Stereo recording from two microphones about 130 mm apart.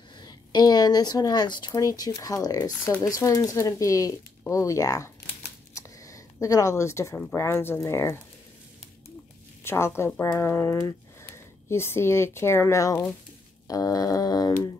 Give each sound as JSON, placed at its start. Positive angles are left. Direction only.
{"t": 0.2, "sound": "a woman's voice", "side_deg": 35}
{"t": 5.8, "sound": "a sound", "side_deg": 25}
{"t": 7.3, "sound": "speech", "side_deg": 20}
{"t": 9.6, "sound": "speech", "side_deg": 20}